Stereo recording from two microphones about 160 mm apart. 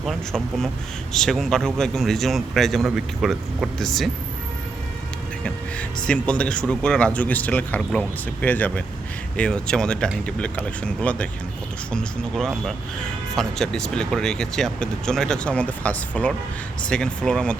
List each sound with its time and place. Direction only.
0.0 s speech: centre (ahead or behind)
5.4 s speech: 5° left (ahead or behind)